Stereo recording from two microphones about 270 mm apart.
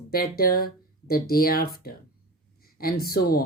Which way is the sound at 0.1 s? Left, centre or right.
Left.